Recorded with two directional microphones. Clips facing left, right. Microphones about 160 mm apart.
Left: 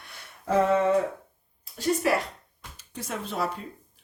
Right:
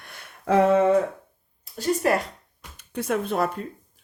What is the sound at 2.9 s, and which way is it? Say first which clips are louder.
Speech: right 8 dB; 55° right (ahead or behind).